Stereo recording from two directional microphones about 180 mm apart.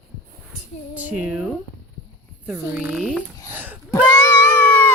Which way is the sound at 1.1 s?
5° right (ahead or behind).